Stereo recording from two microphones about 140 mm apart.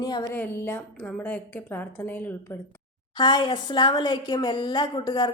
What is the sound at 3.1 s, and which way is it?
A woman's voice, 35° left (ahead or behind).